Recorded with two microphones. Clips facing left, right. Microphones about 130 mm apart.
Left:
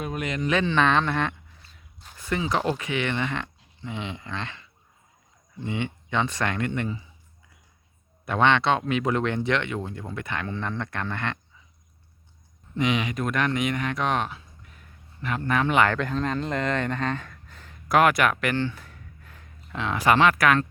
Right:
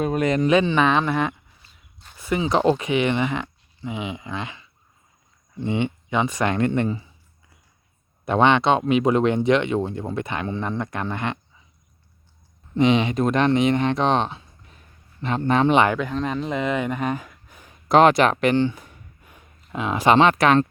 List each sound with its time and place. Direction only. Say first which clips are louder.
0.0 s speech: right 9 dB; 40° right (ahead or behind)
0.4 s speech: right 2 dB; 15° right (ahead or behind)
2.1 s a sound: right 4 dB; 10° right (ahead or behind)
2.4 s speech: right 7 dB; 25° right (ahead or behind)
5.6 s speech: right 6 dB; 20° right (ahead or behind)
6.6 s speech: right 7 dB; 35° right (ahead or behind)
8.2 s speech: right 4 dB; 20° right (ahead or behind)
12.7 s speech: right 7 dB; 30° right (ahead or behind)
16.0 s speech: right 2 dB; 5° right (ahead or behind); by 20.7 s 25° right (ahead or behind)